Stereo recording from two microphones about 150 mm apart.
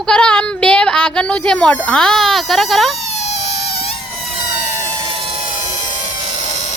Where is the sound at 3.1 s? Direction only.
45° left (ahead or behind).